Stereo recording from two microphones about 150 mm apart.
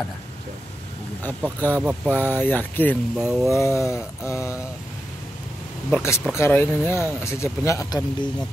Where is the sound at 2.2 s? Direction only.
10° left (ahead or behind).